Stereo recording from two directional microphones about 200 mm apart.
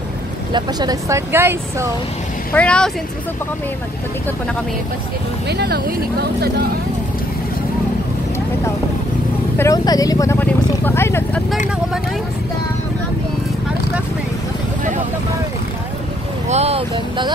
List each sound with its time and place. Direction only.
0.5 s speech: 20° right (ahead or behind)
2.5 s speech: 5° left (ahead or behind)
5.5 s speech: 55° right (ahead or behind)
9.6 s speech: 15° left (ahead or behind)
16.4 s speech: 30° right (ahead or behind)